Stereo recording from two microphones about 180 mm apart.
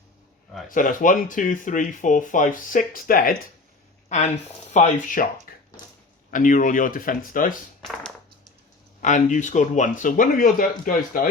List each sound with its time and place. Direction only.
0.7 s speech: 50° left (ahead or behind)
4.7 s speech: 40° left (ahead or behind)
5.5 s a sound: 55° left (ahead or behind)
6.3 s speech: 45° left (ahead or behind)
9.0 s speech: 45° left (ahead or behind)